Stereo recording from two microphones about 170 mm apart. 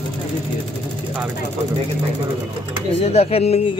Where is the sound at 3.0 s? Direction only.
35° left (ahead or behind).